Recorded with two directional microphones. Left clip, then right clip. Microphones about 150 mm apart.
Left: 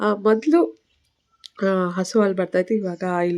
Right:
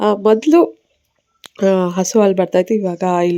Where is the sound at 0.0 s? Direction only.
10° right (ahead or behind).